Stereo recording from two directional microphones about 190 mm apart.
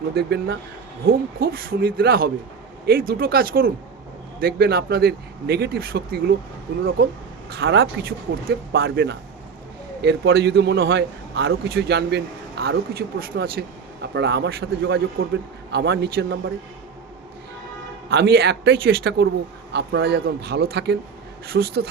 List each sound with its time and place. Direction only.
0.1 s a man's voice: 55° right (ahead or behind)
7.6 s a man's voice: 60° right (ahead or behind)
18.1 s a man's voice: 60° right (ahead or behind)